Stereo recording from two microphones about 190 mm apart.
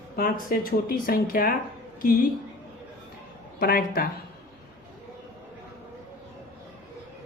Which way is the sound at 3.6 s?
50° left (ahead or behind).